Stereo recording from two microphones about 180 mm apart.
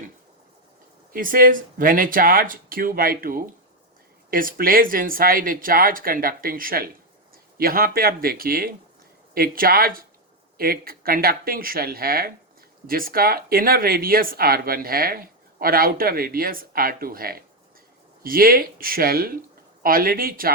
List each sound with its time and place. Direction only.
1.1 s speech: 50° right (ahead or behind)